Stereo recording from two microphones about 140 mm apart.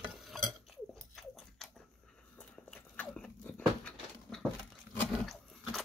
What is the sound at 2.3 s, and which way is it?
Dog, 10° left (ahead or behind).